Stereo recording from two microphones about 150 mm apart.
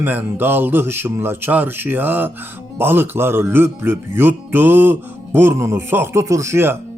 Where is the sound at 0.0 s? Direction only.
15° right (ahead or behind).